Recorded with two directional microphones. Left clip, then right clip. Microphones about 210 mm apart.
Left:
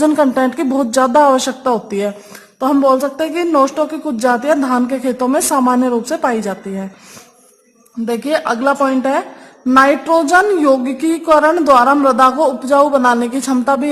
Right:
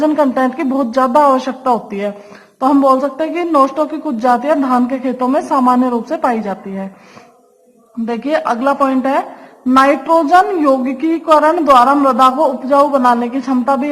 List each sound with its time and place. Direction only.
0.0 s speech: 50° left (ahead or behind)
8.0 s speech: 45° left (ahead or behind)